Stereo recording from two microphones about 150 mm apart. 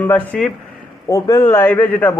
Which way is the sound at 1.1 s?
20° left (ahead or behind).